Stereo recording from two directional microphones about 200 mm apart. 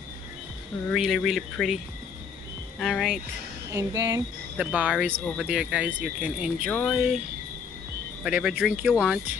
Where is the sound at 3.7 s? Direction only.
15° right (ahead or behind).